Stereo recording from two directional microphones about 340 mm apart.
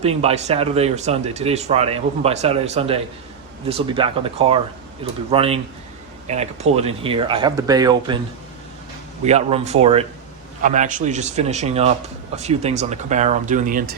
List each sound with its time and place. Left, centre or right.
0.0 s speech: centre
9.2 s speech: centre